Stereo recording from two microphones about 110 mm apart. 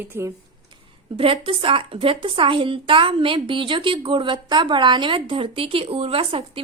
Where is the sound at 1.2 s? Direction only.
55° right (ahead or behind).